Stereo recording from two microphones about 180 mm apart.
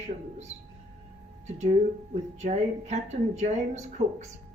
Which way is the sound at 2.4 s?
40° right (ahead or behind).